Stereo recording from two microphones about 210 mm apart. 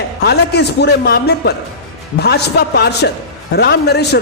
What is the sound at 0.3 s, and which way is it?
A man's voice, 50° left (ahead or behind).